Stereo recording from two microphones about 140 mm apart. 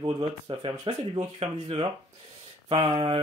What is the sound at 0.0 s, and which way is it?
Speech, 35° right (ahead or behind).